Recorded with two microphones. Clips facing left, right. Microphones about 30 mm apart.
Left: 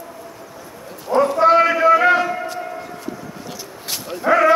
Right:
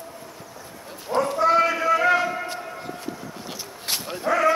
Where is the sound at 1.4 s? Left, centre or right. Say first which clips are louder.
Left 5 dB; left.